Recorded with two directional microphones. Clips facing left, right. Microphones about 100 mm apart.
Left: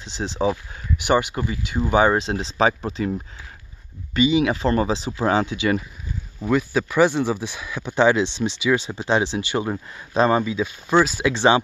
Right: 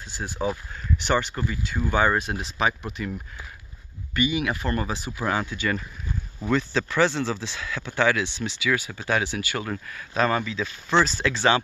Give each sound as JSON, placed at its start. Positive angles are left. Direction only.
{"t": 0.0, "sound": "speech", "side_deg": 20}
{"t": 11.3, "sound": "speech", "side_deg": 20}